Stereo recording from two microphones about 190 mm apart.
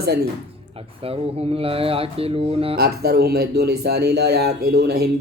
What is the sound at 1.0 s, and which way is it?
Speech, 30° right (ahead or behind).